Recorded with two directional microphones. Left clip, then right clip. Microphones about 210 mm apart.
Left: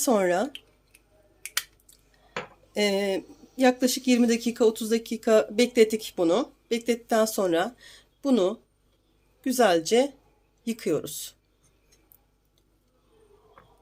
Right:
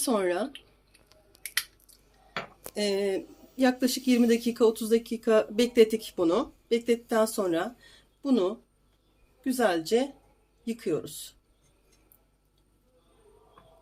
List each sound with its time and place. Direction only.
0.0 s speech: 30° left (ahead or behind)
2.7 s speech: 25° left (ahead or behind)